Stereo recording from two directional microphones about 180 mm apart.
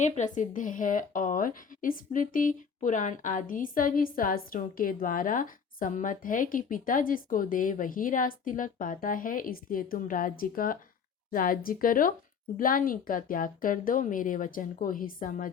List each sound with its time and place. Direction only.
0.0 s a woman's voice: 45° left (ahead or behind)